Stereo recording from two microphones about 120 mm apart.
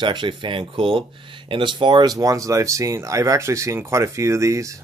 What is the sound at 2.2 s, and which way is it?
Speech, 25° right (ahead or behind).